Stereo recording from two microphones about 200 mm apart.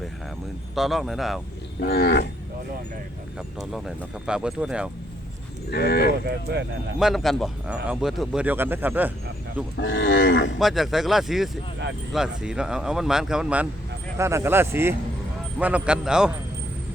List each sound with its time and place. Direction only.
0.8 s speech: centre (ahead or behind)
1.8 s speech: 55° left (ahead or behind)
3.3 s speech: centre (ahead or behind)
5.7 s speech: 55° left (ahead or behind)
6.2 s speech: 55° right (ahead or behind)
7.0 s speech: centre (ahead or behind)
9.7 s livestock: 65° left (ahead or behind)
10.6 s speech: centre (ahead or behind)